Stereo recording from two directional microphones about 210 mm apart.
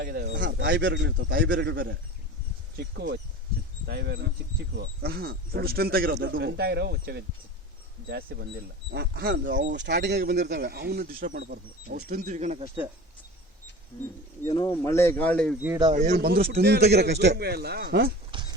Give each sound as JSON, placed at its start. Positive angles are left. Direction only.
{"t": 0.0, "sound": "a man's voice", "side_deg": -45}
{"t": 1.2, "sound": "speech", "side_deg": -45}
{"t": 1.5, "sound": "a man's voice", "side_deg": -55}
{"t": 14.4, "sound": "speech", "side_deg": 20}
{"t": 15.6, "sound": "speech", "side_deg": -10}
{"t": 15.9, "sound": "speech", "side_deg": -40}
{"t": 18.3, "sound": "a sound", "side_deg": -20}